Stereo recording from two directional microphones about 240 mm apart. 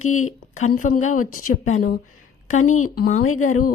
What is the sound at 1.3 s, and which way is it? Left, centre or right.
Speech, left.